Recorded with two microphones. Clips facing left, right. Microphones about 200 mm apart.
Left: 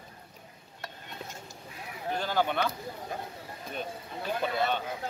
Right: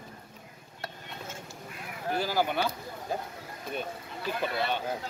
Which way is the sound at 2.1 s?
10° right (ahead or behind).